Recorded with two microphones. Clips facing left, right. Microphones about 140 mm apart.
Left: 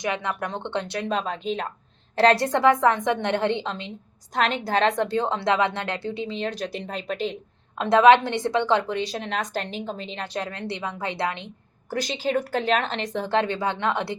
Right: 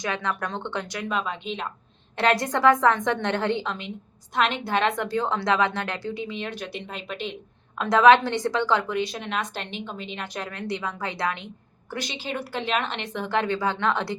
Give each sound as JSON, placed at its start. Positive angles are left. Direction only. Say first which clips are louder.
{"t": 0.0, "sound": "a woman's voice", "louder": "left 1 dB", "side_deg": 20}
{"t": 7.8, "sound": "a woman's voice", "louder": "left 1 dB", "side_deg": 25}
{"t": 11.9, "sound": "a woman's voice", "louder": "left 6 dB", "side_deg": 40}